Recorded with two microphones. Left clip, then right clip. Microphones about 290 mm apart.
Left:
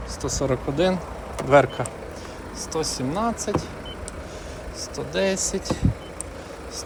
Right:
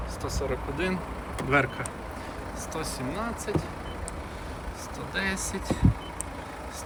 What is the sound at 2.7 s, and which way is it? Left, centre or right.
Speech, centre.